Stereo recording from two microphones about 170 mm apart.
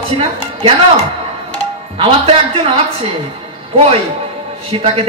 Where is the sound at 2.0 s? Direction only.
35° right (ahead or behind).